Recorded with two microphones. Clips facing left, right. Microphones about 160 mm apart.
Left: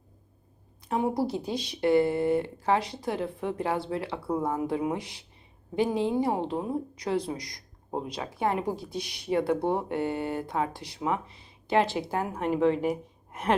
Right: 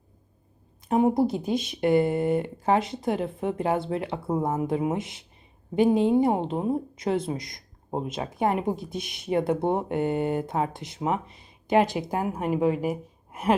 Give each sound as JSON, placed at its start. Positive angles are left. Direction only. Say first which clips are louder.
{"t": 0.9, "sound": "a woman's voice", "louder": "right 6 dB", "side_deg": -20}